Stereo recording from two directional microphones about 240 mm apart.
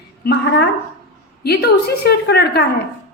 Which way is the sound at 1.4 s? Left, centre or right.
Left.